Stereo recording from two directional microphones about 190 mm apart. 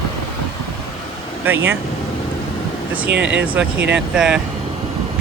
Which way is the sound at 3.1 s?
70° right (ahead or behind).